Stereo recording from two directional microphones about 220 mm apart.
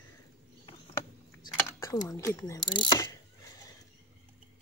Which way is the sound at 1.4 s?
15° left (ahead or behind).